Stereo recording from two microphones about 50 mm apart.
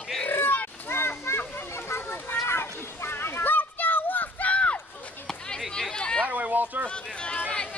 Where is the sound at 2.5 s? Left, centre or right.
Left.